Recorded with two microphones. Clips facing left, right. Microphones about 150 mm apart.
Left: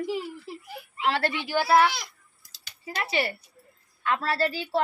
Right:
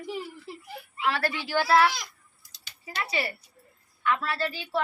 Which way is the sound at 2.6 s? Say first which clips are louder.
Left 1 dB; 40° left (ahead or behind).